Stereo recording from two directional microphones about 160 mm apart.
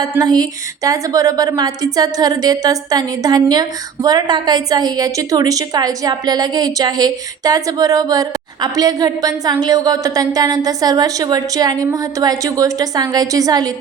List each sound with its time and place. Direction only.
0.2 s a woman's voice: 25° right (ahead or behind)